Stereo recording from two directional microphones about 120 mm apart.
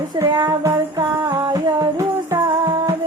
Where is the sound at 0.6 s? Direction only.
30° right (ahead or behind).